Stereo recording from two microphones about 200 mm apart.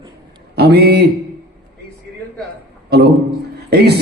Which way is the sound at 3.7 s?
55° right (ahead or behind).